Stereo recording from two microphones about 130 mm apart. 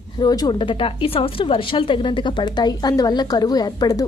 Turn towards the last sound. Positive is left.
turn(degrees=30)  # may be behind; listen again after turning